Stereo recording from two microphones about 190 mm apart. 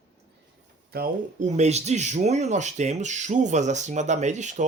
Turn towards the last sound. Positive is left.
turn(degrees=-40)  # may be behind; listen again after turning